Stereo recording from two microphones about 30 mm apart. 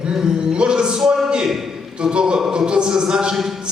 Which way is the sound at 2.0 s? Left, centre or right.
Right.